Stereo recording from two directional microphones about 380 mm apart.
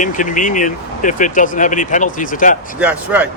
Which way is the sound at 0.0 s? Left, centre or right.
Centre.